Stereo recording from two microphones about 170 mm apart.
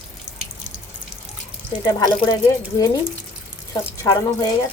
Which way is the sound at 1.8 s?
25° left (ahead or behind).